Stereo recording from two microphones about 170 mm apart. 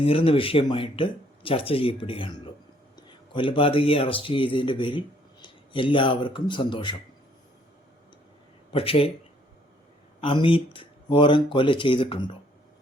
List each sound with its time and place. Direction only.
0.0 s speech: 35° left (ahead or behind)
8.7 s speech: 35° left (ahead or behind)
10.2 s speech: 30° left (ahead or behind)